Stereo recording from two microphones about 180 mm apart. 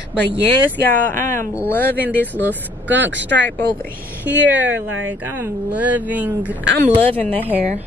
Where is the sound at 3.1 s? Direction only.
85° right.